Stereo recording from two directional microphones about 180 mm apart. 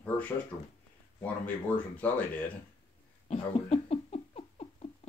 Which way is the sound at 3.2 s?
35° left (ahead or behind).